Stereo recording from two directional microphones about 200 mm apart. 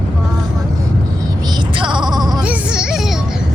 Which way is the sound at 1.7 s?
25° right (ahead or behind).